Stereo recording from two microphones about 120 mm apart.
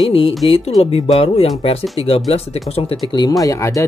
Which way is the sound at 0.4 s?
50° left (ahead or behind).